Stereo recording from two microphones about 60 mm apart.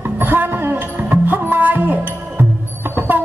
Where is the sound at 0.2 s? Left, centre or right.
Right.